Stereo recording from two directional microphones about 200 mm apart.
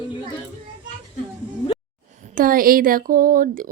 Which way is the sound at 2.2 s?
45° right (ahead or behind).